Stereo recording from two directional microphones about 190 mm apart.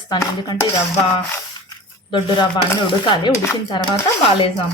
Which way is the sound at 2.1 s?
25° left (ahead or behind).